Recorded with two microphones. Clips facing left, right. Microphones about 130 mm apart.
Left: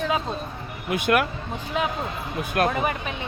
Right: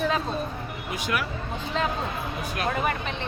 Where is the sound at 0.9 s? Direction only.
55° left (ahead or behind).